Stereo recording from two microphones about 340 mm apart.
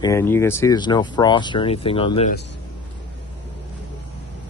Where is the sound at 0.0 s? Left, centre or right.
Centre.